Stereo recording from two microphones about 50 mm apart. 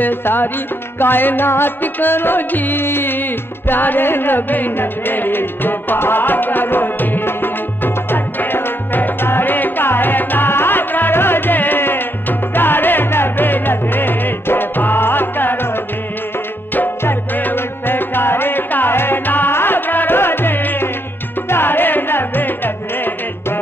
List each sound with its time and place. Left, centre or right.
0.0 s music: left
17.4 s music: left